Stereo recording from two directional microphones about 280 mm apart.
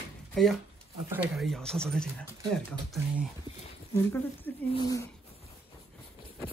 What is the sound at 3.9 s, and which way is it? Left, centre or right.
Speech, centre.